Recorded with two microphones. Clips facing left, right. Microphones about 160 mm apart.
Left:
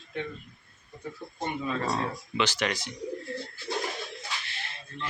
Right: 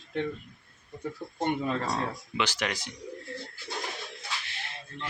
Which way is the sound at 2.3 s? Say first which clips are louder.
Left 2 dB; 10° right (ahead or behind).